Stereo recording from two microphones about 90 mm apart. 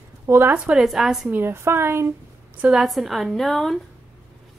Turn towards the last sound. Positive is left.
turn(degrees=5)  # may be behind; listen again after turning